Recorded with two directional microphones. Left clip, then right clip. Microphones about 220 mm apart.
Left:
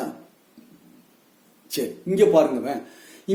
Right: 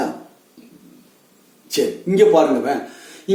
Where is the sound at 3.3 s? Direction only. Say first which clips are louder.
Right 6 dB; 50° left (ahead or behind).